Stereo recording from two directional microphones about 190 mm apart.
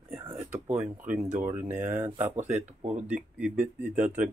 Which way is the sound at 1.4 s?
10° right (ahead or behind).